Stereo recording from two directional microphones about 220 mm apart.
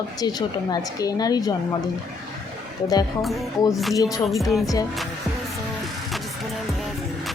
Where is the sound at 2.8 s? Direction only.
15° left (ahead or behind).